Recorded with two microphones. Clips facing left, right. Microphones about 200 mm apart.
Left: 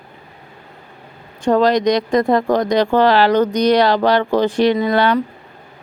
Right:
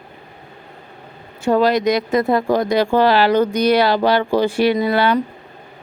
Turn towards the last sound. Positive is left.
turn(degrees=-5)  # may be behind; listen again after turning